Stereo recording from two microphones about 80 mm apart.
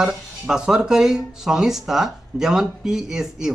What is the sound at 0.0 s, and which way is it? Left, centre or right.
A man's voice, centre.